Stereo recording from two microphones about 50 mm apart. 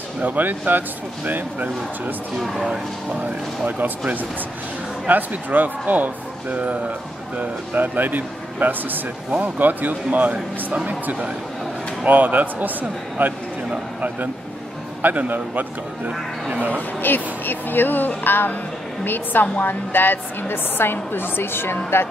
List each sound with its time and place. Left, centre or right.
0.2 s speech: right
3.2 s a man's voice: right
15.0 s speech: right
17.0 s a woman's voice: left